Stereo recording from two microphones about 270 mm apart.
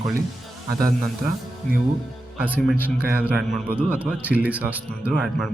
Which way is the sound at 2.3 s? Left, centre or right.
Centre.